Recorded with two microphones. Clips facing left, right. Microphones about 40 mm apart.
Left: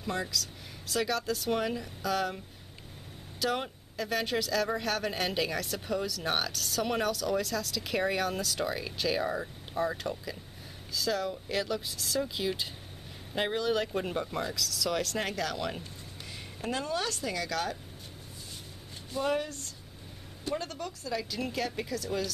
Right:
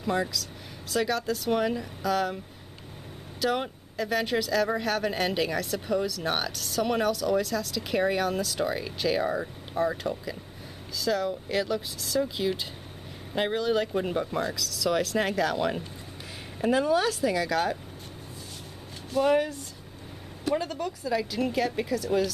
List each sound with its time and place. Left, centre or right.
0.0 s speech: centre
19.2 s speech: centre
20.5 s speech: centre